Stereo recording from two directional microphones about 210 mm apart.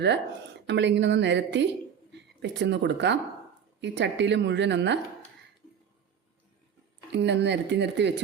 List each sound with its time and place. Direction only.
0.7 s a woman's voice: 55° right (ahead or behind)
7.1 s a woman's voice: 55° right (ahead or behind)